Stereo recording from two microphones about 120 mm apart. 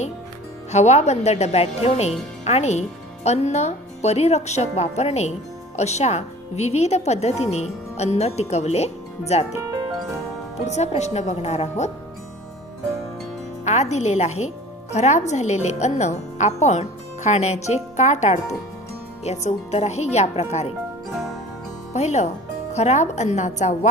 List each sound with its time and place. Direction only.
0.7 s a woman's voice: 70° left (ahead or behind)
10.7 s a woman's voice: 70° left (ahead or behind)
13.7 s a woman's voice: 70° left (ahead or behind)
17.9 s a woman's voice: 75° left (ahead or behind)
21.9 s a woman's voice: 70° left (ahead or behind)